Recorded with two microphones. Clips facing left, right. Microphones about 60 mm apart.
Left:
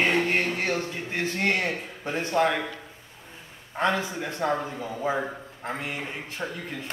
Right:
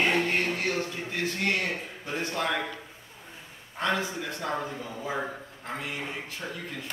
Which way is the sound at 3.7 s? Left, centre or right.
Left.